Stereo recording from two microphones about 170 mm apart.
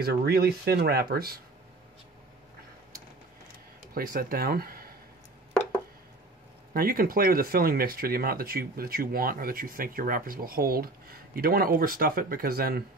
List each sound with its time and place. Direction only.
0.0 s speech: 65° right (ahead or behind)
3.9 s speech: 60° right (ahead or behind)
5.5 s chopping: 5° left (ahead or behind)
6.7 s speech: 60° right (ahead or behind)